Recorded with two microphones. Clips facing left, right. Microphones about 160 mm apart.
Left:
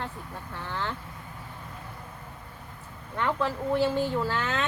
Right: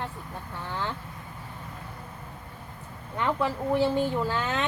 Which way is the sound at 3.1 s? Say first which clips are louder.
Right 1 dB; 15° right (ahead or behind).